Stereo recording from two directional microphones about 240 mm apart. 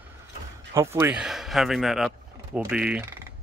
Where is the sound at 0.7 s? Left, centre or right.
Centre.